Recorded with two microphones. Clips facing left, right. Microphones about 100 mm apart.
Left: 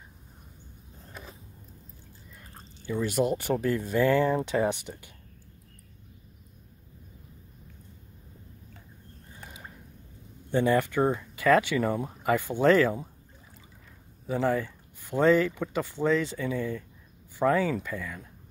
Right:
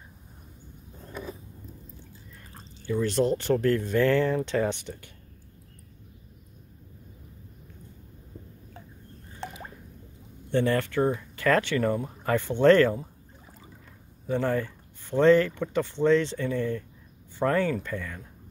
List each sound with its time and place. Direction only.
2.9 s speech: 10° left (ahead or behind)
9.4 s drip: 75° right (ahead or behind)
10.5 s speech: 15° left (ahead or behind)
14.2 s speech: 5° left (ahead or behind)